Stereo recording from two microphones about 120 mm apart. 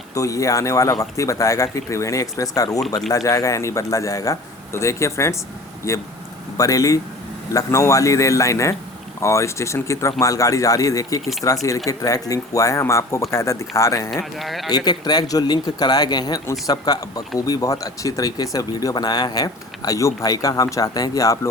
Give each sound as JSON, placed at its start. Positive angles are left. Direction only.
{"t": 0.1, "sound": "speech", "side_deg": 25}
{"t": 14.3, "sound": "speech", "side_deg": 0}
{"t": 14.7, "sound": "speech", "side_deg": 35}